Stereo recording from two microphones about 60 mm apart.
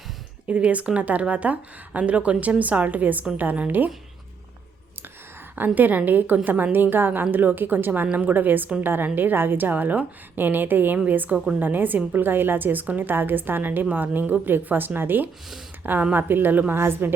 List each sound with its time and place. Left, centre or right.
0.4 s a woman's voice: right
5.5 s a woman's voice: right
8.0 s a woman's voice: right